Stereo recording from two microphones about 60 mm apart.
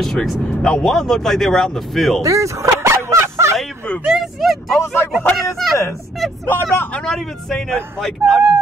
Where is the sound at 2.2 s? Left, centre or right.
Right.